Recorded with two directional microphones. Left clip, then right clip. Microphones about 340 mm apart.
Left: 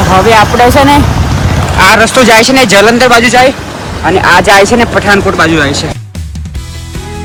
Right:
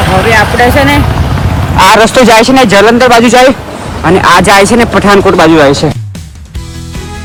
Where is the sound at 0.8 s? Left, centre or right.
Centre.